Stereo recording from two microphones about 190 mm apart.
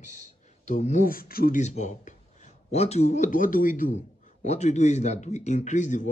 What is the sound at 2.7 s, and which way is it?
A man's voice, 35° left (ahead or behind).